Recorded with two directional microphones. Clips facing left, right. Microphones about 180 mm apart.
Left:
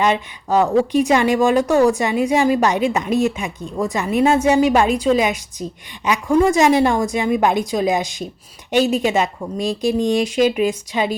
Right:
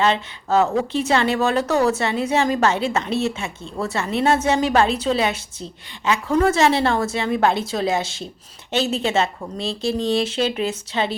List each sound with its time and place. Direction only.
0.0 s speech: 15° left (ahead or behind)